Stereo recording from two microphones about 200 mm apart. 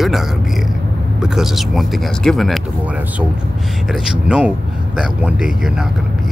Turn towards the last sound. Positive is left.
turn(degrees=-5)  # may be behind; listen again after turning